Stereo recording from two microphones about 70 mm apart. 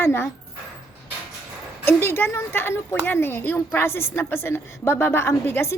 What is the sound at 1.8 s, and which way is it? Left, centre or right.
A woman's voice, left.